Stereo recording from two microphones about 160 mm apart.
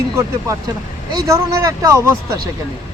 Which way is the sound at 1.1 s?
20° right (ahead or behind).